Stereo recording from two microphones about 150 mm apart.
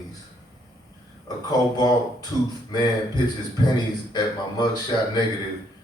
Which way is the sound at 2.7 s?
30° left (ahead or behind).